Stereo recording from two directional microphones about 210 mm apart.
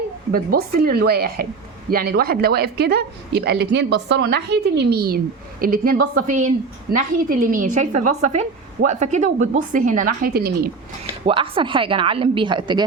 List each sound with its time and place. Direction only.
0.3 s a woman's voice: 45° right (ahead or behind)
11.3 s a woman's voice: 25° right (ahead or behind)